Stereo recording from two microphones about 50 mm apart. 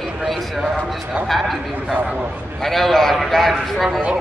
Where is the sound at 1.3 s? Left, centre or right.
Centre.